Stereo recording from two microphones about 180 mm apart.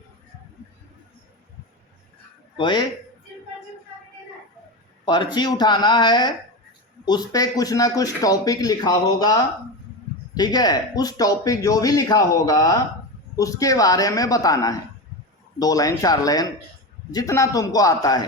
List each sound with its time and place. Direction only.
2.6 s a man's voice: 25° left (ahead or behind)
5.0 s a man's voice: 25° left (ahead or behind)